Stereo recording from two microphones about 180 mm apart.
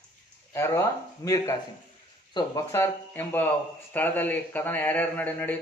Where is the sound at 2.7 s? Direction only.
10° left (ahead or behind).